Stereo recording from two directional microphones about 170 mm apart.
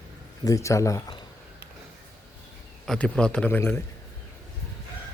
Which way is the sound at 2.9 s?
5° left (ahead or behind).